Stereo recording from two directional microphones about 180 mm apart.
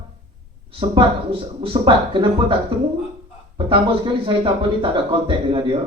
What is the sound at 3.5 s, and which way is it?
Speech, 30° right (ahead or behind).